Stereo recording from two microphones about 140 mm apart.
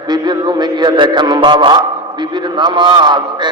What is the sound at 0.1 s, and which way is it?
A man's voice, 30° right (ahead or behind).